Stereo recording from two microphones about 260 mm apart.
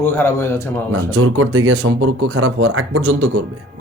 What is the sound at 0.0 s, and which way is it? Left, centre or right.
Speech, centre.